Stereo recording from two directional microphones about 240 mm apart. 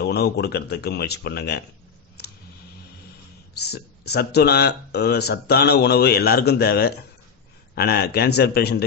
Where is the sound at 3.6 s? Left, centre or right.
Left.